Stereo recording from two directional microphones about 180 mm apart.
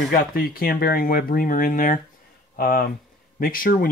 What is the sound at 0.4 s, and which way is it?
Speech, 55° left (ahead or behind).